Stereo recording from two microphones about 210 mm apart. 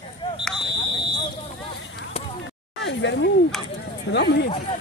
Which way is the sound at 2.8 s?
55° left (ahead or behind).